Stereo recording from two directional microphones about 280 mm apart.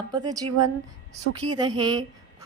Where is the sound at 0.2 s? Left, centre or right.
Centre.